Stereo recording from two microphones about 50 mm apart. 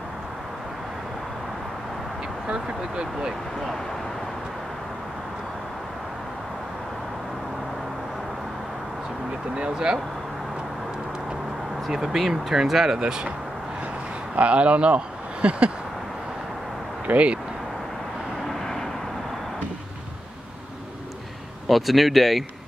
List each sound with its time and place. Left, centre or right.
2.4 s speech: centre
9.6 s speech: centre
11.9 s speech: centre
14.3 s speech: right
17.1 s speech: right
18.5 s vehicle: centre
21.6 s speech: centre